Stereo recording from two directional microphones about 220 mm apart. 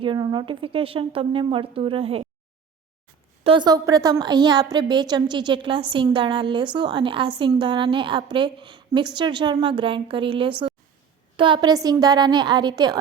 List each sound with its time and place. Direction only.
0.0 s a woman's voice: 20° right (ahead or behind)
3.4 s a woman's voice: 20° right (ahead or behind)